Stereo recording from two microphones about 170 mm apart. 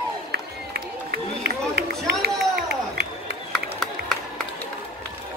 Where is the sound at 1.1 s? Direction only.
65° right (ahead or behind).